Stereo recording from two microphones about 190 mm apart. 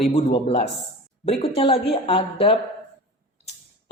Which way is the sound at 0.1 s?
35° left (ahead or behind).